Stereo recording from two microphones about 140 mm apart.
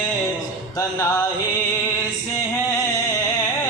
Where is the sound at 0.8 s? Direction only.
25° left (ahead or behind).